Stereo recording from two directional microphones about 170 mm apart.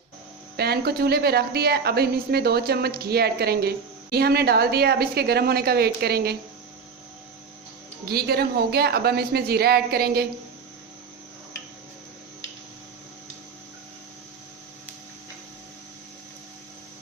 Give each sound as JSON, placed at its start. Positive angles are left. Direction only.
{"t": 0.5, "sound": "speech", "side_deg": -70}
{"t": 8.0, "sound": "speech", "side_deg": -65}